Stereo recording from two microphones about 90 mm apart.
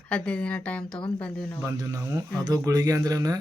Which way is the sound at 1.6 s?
35° right (ahead or behind).